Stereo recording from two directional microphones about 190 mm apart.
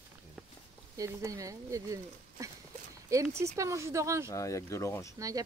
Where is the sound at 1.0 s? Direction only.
15° right (ahead or behind).